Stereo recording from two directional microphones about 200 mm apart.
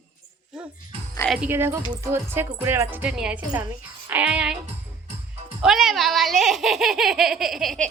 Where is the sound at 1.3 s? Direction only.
10° right (ahead or behind).